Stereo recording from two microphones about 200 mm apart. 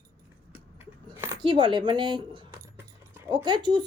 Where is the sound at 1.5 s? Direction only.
25° right (ahead or behind).